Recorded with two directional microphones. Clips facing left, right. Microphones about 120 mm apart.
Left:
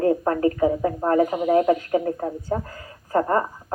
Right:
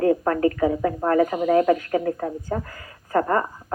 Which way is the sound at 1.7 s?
25° left (ahead or behind).